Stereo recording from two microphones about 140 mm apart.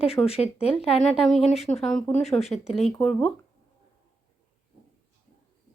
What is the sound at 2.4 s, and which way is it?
Speech, 50° left (ahead or behind).